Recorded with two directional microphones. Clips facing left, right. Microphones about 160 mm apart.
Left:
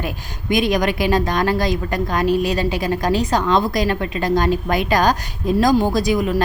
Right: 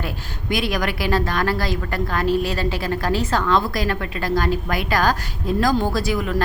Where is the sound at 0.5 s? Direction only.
20° left (ahead or behind).